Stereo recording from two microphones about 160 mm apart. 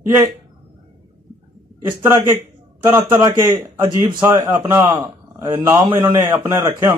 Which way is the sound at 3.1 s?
15° right (ahead or behind).